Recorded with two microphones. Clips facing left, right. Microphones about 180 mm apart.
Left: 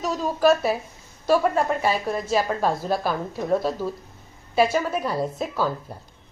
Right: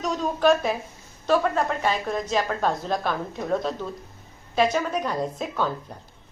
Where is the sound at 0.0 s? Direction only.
5° left (ahead or behind).